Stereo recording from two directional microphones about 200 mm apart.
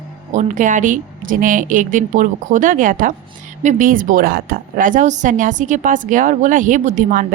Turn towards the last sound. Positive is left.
turn(degrees=-40)  # may be behind; listen again after turning